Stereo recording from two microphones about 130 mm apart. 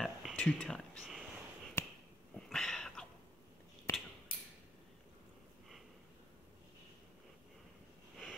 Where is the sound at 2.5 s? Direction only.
5° left (ahead or behind).